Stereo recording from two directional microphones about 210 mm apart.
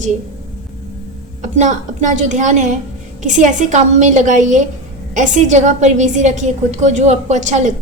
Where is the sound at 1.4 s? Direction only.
35° right (ahead or behind).